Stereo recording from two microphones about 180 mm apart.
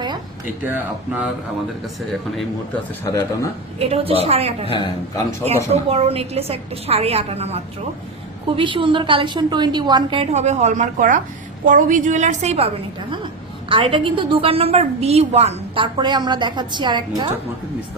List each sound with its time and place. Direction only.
0.6 s speech: 10° right (ahead or behind)
3.0 s a man's voice: 15° left (ahead or behind)
3.8 s a woman's voice: 35° right (ahead or behind)
4.7 s speech: 25° left (ahead or behind)
5.7 s a woman's voice: 35° right (ahead or behind)